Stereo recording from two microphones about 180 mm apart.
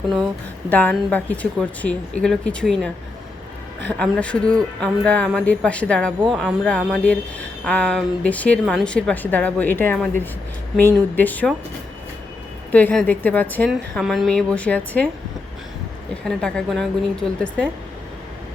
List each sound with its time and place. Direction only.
0.7 s a woman's voice: 10° left (ahead or behind)
3.9 s a woman's voice: 5° left (ahead or behind)
12.7 s a woman's voice: 5° left (ahead or behind)
16.4 s a woman's voice: 5° left (ahead or behind)